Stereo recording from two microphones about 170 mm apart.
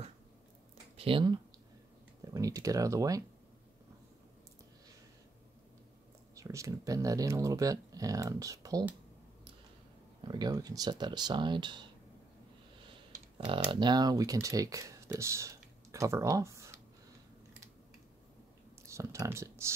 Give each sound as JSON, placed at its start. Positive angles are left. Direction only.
{"t": 0.9, "sound": "speech", "side_deg": -30}
{"t": 6.3, "sound": "speech", "side_deg": -20}
{"t": 10.2, "sound": "speech", "side_deg": -25}
{"t": 13.5, "sound": "speech", "side_deg": -30}
{"t": 18.9, "sound": "speech", "side_deg": -15}